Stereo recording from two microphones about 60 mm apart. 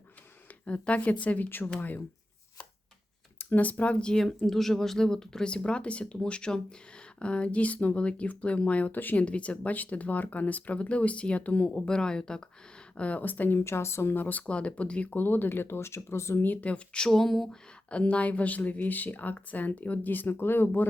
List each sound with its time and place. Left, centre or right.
0.6 s speech: left
1.5 s speech: left
3.3 s speech: left
11.9 s speech: centre
13.0 s speech: left
13.7 s speech: left
16.4 s speech: left
17.1 s speech: centre
17.9 s speech: left